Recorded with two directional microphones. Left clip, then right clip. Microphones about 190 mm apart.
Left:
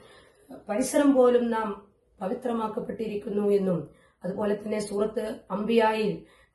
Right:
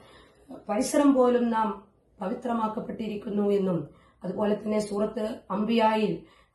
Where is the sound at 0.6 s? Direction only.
10° left (ahead or behind).